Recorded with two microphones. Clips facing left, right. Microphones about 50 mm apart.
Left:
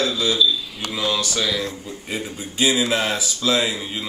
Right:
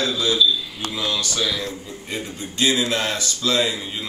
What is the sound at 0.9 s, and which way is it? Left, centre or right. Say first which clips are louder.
Speech: left 2 dB; left.